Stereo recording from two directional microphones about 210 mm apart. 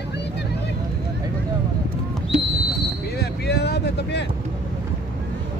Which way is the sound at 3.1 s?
50° left (ahead or behind).